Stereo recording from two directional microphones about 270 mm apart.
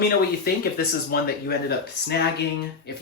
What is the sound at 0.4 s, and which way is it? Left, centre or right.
Speech, left.